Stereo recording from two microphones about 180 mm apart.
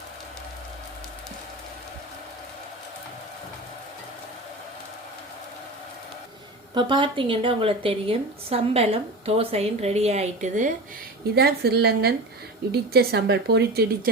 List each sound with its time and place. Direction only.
6.7 s a woman's voice: 25° right (ahead or behind)
11.3 s speech: 60° right (ahead or behind)